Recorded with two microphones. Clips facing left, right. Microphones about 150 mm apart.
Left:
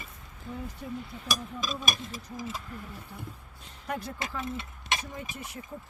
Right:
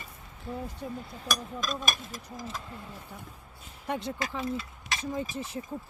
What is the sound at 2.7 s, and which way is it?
Speech, 25° right (ahead or behind).